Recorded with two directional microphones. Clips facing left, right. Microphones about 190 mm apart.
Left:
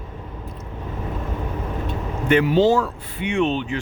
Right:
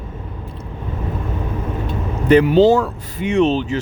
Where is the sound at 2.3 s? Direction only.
35° right (ahead or behind).